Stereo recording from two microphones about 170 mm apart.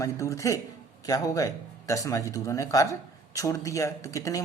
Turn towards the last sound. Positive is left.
turn(degrees=20)  # may be behind; listen again after turning